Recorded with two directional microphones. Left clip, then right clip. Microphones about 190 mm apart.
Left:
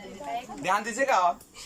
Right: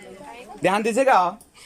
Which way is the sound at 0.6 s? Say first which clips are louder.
Right 8 dB; 55° right (ahead or behind).